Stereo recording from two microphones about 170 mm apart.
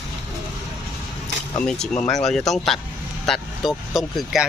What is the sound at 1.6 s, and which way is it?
Speech, 5° left (ahead or behind).